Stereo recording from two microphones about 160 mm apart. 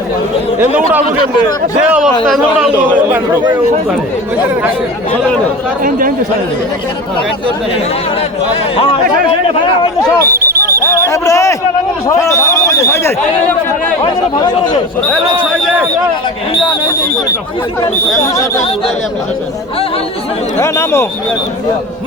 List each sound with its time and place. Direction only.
2.2 s a man's voice: centre (ahead or behind)
2.7 s speech: 10° right (ahead or behind)
8.7 s speech: 35° left (ahead or behind)
10.3 s a sound: 70° right (ahead or behind)
10.8 s a sound: 20° left (ahead or behind)
12.0 s a man's voice: 20° left (ahead or behind)
14.0 s speech: 25° left (ahead or behind)
20.6 s a man's voice: 15° left (ahead or behind)